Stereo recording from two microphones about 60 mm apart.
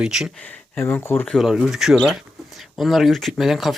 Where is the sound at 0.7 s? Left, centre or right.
Left.